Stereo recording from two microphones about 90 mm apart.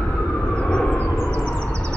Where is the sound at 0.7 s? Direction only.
10° left (ahead or behind).